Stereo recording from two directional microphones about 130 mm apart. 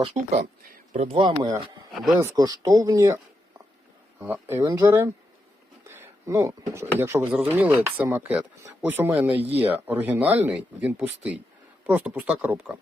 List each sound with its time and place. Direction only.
0.1 s speech: 60° right (ahead or behind)
0.9 s speech: 45° right (ahead or behind)
1.4 s speech: 30° right (ahead or behind)
4.2 s speech: 15° right (ahead or behind)
5.9 s a sound: 20° right (ahead or behind)
7.0 s speech: 15° right (ahead or behind)